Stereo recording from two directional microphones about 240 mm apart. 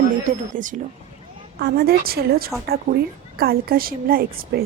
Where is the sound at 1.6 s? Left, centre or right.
Right.